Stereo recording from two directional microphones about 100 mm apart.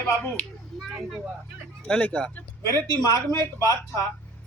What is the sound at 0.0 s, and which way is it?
Speech, 15° left (ahead or behind).